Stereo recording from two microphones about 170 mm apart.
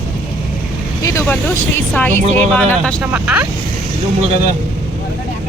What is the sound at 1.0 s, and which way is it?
Speech, 15° left (ahead or behind).